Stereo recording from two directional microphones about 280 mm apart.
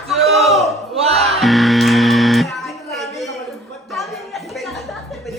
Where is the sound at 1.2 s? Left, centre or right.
Centre.